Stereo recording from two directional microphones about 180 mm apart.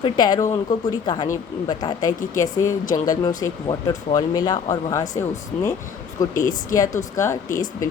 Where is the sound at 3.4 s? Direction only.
20° left (ahead or behind).